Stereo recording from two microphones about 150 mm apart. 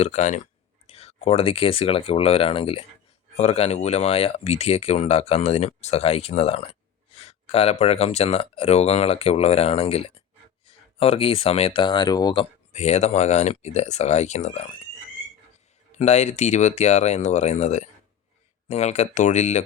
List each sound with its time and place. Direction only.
0.0 s speech: 50° left (ahead or behind); by 12.5 s 30° left (ahead or behind)
12.7 s speech: 45° left (ahead or behind)
15.9 s speech: 50° left (ahead or behind)